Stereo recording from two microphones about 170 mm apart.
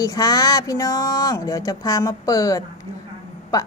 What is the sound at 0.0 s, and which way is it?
Speech, 20° left (ahead or behind).